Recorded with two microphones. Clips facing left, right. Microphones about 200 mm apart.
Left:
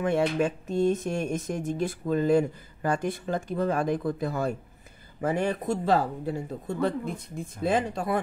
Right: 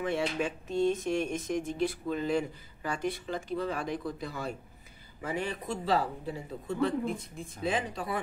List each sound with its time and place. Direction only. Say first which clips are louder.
0.0 s speech: left 6 dB; 50° left (ahead or behind)